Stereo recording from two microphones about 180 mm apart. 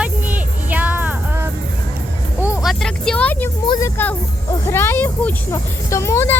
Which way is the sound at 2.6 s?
Centre (ahead or behind).